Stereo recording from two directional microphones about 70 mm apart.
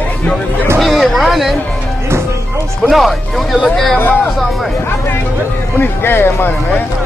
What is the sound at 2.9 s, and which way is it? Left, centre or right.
Speech, centre.